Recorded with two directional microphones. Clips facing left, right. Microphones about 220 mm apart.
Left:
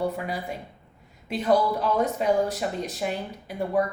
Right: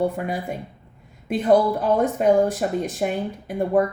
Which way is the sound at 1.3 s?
50° right (ahead or behind).